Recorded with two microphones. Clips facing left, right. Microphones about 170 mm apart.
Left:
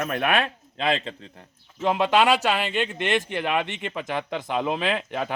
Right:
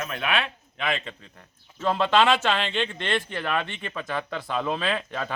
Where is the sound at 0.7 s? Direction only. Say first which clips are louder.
Left 4 dB; 30° left (ahead or behind).